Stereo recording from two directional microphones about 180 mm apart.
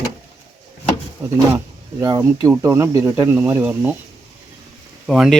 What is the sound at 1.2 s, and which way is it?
Speech, 10° right (ahead or behind).